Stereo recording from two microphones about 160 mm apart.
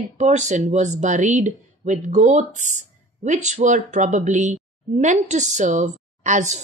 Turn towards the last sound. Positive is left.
turn(degrees=-50)  # may be behind; listen again after turning